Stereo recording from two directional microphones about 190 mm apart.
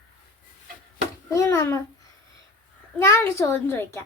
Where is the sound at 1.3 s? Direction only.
15° left (ahead or behind).